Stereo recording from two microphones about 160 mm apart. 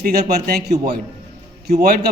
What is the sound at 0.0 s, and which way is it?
Speech, 80° right.